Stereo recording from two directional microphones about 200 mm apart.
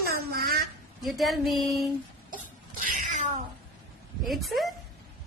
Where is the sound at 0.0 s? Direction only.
50° right (ahead or behind).